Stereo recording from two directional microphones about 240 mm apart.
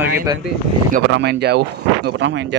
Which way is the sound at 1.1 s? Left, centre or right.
Right.